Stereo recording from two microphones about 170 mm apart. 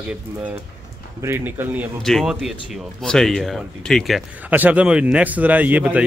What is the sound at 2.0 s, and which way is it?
Speech, centre (ahead or behind).